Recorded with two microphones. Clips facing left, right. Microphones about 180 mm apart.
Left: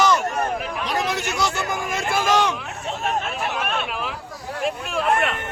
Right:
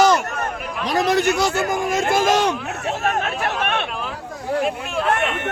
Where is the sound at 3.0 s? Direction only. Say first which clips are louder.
Right 1 dB; 70° right (ahead or behind).